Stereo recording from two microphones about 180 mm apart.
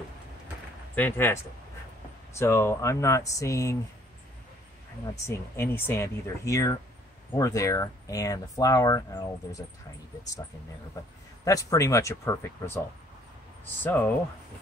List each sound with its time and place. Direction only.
0.9 s speech: 10° left (ahead or behind)
5.1 s speech: 15° left (ahead or behind)
11.4 s speech: 20° left (ahead or behind)